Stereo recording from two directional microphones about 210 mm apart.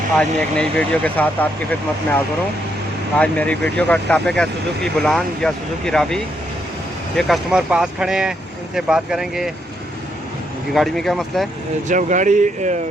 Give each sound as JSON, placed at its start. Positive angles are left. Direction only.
{"t": 0.2, "sound": "speech", "side_deg": 5}
{"t": 3.2, "sound": "speech", "side_deg": 5}
{"t": 10.8, "sound": "speech", "side_deg": 0}
{"t": 11.9, "sound": "speech", "side_deg": -35}